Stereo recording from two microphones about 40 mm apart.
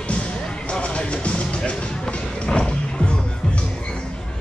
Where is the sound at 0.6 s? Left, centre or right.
Left.